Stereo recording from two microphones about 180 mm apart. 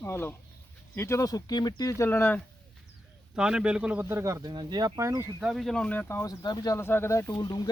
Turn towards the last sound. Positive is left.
turn(degrees=25)  # may be behind; listen again after turning